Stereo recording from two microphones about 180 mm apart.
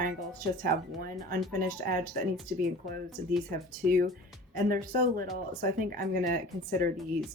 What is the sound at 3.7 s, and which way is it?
Speech, 55° right (ahead or behind).